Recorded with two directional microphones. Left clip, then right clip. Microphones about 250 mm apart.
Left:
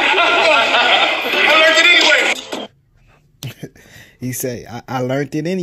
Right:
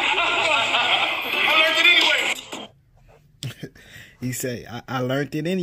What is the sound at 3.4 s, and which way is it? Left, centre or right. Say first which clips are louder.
Speech: left 4 dB; centre.